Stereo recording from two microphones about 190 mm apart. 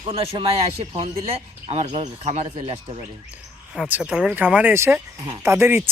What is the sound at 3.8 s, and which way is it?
Speech, 5° right (ahead or behind).